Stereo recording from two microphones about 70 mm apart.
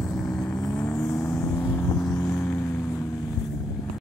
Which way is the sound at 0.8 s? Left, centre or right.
Left.